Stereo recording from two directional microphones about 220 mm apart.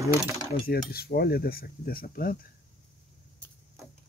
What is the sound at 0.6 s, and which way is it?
Cutlery, 45° left (ahead or behind).